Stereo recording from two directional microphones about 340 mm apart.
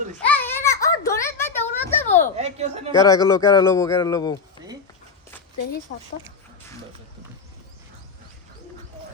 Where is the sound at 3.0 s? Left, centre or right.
Centre.